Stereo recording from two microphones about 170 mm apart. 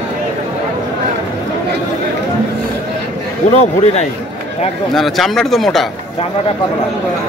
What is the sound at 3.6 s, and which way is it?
Speech, 40° left (ahead or behind).